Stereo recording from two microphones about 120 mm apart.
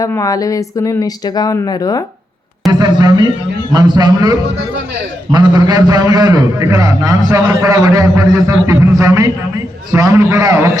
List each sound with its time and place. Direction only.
0.0 s speech: 30° left (ahead or behind)
2.7 s a man's voice: 35° right (ahead or behind)